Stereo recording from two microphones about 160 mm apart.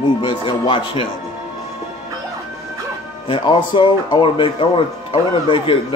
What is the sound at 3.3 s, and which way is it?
A man's voice, 30° left (ahead or behind).